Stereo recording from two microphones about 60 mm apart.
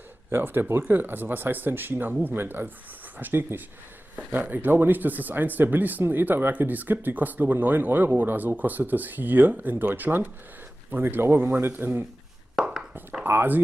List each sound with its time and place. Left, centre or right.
0.3 s speech: right
12.5 s a sound: centre
13.2 s speech: right